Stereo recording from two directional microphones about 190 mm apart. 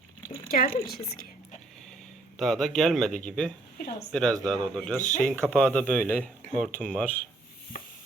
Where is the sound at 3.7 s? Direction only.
55° left (ahead or behind).